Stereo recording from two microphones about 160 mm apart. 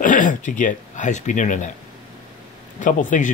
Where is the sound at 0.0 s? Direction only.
55° left (ahead or behind).